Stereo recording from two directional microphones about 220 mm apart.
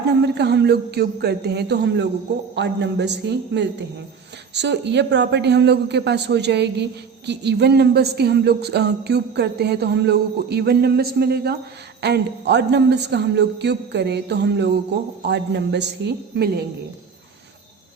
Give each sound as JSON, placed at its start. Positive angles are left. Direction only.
{"t": 0.2, "sound": "speech", "side_deg": -50}